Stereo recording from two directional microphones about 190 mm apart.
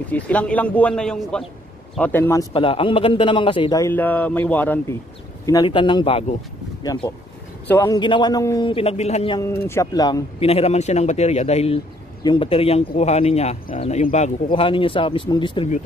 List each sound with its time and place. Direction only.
0.1 s speech: 5° left (ahead or behind)
2.5 s a man's voice: 30° left (ahead or behind)
3.8 s speech: 10° left (ahead or behind)
5.4 s a man's voice: 20° left (ahead or behind)
6.8 s a man's voice: 20° left (ahead or behind)
9.4 s speech: 15° left (ahead or behind)
10.4 s speech: 35° left (ahead or behind)
14.5 s a man's voice: 25° left (ahead or behind)